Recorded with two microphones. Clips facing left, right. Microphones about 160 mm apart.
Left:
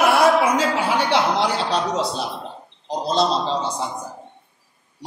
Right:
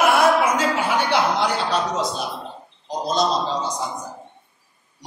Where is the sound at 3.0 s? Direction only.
30° left (ahead or behind).